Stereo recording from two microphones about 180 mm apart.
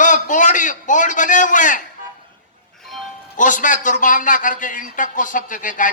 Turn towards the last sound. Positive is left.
turn(degrees=45)  # may be behind; listen again after turning